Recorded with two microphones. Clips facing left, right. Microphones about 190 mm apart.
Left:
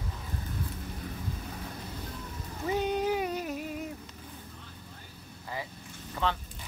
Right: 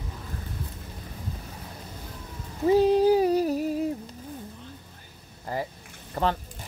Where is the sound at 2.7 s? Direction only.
35° right (ahead or behind).